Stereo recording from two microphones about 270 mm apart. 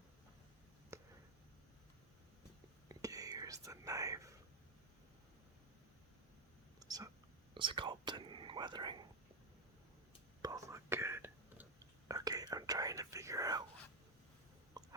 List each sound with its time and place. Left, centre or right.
0.9 s a sound: centre
2.9 s whispering: centre
6.7 s whispering: centre
7.5 s speech: centre
10.4 s whispering: centre
12.0 s speech: centre
14.8 s a sound: centre